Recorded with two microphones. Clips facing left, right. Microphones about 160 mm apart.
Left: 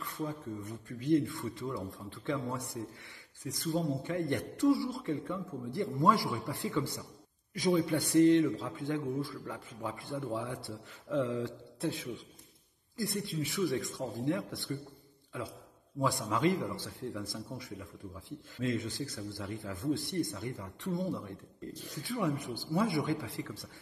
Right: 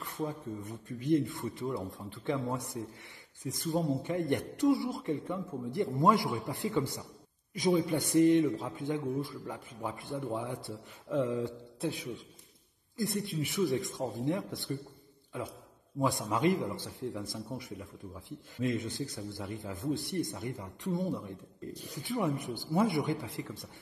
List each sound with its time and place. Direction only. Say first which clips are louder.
0.0 s a man's voice: right 1 dB; 20° right (ahead or behind)
16.0 s a man's voice: right 1 dB; 20° right (ahead or behind)